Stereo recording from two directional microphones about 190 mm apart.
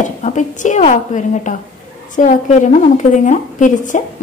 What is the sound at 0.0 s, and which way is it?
A woman's voice, 40° left (ahead or behind).